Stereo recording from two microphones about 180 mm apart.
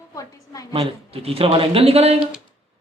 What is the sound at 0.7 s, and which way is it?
Speech, 30° right (ahead or behind).